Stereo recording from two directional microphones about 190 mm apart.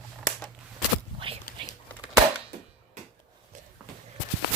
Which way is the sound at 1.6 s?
25° right (ahead or behind).